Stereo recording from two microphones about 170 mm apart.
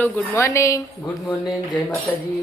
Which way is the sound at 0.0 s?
15° left (ahead or behind).